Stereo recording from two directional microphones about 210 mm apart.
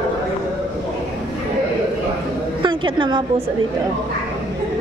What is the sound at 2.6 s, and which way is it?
Speech, 20° right (ahead or behind).